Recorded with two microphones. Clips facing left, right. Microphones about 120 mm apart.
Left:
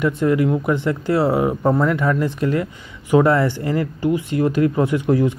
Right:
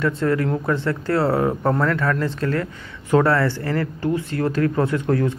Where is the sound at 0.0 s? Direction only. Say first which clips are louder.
Left 3 dB; 15° left (ahead or behind).